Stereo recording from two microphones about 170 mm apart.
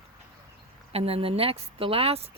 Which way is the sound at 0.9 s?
35° right (ahead or behind).